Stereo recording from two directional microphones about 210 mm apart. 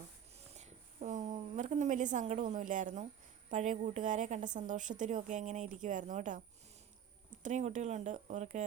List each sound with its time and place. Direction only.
0.3 s a sound: 30° right (ahead or behind)
3.5 s a woman's voice: 35° right (ahead or behind)
7.4 s a woman's voice: 35° right (ahead or behind)